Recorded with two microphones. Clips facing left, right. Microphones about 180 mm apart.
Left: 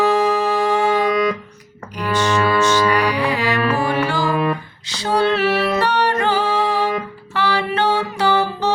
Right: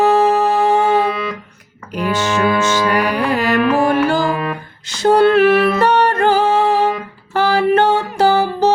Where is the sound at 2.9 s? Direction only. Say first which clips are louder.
Right 2 dB; 50° right (ahead or behind).